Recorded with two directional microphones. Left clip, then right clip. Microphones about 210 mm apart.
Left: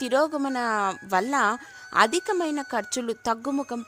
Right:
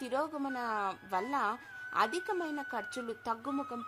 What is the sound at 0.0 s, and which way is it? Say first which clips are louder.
Speech: left 11 dB; 50° left (ahead or behind).